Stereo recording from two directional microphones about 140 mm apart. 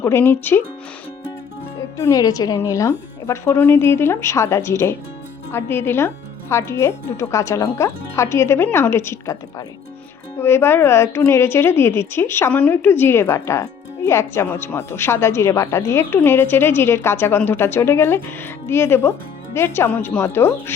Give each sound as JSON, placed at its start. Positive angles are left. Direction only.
{"t": 0.0, "sound": "a woman's voice", "side_deg": 15}
{"t": 2.0, "sound": "a woman's voice", "side_deg": 25}